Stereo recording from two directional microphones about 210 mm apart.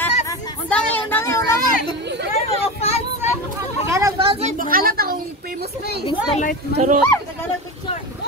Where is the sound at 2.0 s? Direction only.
55° right (ahead or behind).